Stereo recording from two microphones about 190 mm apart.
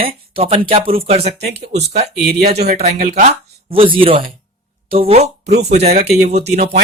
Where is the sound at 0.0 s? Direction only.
30° right (ahead or behind).